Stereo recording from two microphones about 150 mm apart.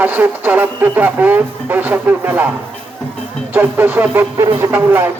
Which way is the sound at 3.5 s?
10° right (ahead or behind).